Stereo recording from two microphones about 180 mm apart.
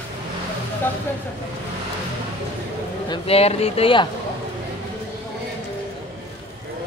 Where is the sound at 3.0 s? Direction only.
35° left (ahead or behind).